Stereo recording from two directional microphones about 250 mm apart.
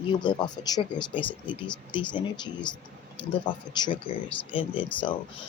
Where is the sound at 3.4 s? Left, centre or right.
Centre.